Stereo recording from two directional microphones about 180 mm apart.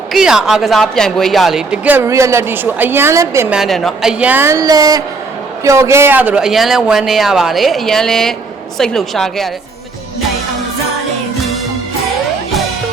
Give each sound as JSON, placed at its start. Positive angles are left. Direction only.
{"t": 0.1, "sound": "speech", "side_deg": -5}
{"t": 3.6, "sound": "speech", "side_deg": 0}